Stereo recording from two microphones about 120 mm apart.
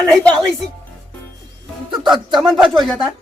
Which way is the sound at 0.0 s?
5° left (ahead or behind).